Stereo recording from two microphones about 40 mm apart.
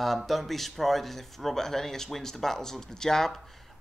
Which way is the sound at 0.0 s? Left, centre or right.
Centre.